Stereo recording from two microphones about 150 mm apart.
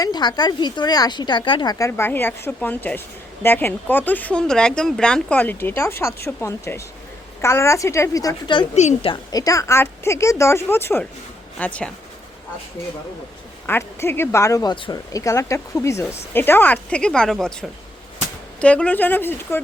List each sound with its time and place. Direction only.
0.0 s speech: 30° left (ahead or behind)
1.9 s speech: 15° left (ahead or behind)
8.7 s a woman's voice: 50° left (ahead or behind)
9.0 s speech: 25° left (ahead or behind); by 11.9 s 10° left (ahead or behind)
13.7 s speech: 15° left (ahead or behind)